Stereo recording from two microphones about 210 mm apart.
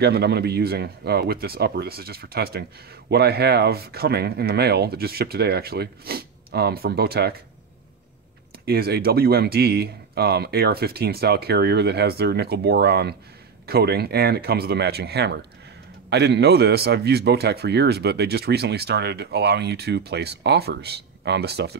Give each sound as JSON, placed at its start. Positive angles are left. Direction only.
{"t": 0.0, "sound": "speech", "side_deg": -50}
{"t": 8.6, "sound": "speech", "side_deg": -50}